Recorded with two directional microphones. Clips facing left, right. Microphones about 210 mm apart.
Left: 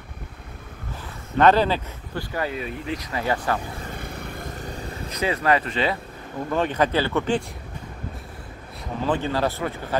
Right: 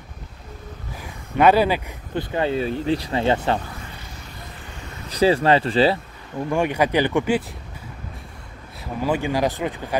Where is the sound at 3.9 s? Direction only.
55° left (ahead or behind); by 5.0 s 35° left (ahead or behind).